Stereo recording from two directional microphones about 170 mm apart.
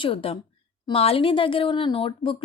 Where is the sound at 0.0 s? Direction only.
30° left (ahead or behind).